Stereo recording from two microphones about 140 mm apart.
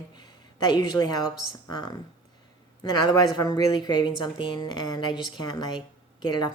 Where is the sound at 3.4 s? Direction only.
25° left (ahead or behind).